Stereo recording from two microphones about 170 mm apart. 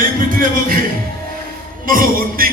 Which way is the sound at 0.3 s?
55° right (ahead or behind).